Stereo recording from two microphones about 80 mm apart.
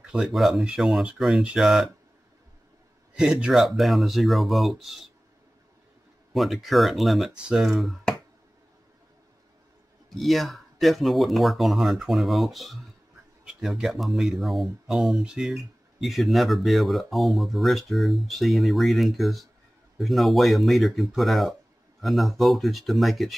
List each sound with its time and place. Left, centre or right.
0.0 s speech: centre
3.2 s speech: centre
6.3 s speech: centre
10.0 s speech: centre